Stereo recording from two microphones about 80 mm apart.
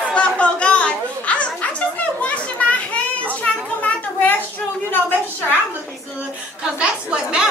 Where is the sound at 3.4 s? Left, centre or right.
Left.